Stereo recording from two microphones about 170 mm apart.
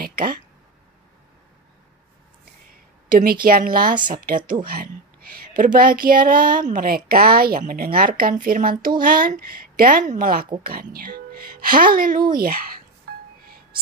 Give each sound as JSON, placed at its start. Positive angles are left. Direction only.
{"t": 0.0, "sound": "a sound", "side_deg": -60}
{"t": 3.1, "sound": "a woman's voice", "side_deg": -55}
{"t": 13.1, "sound": "music", "side_deg": -70}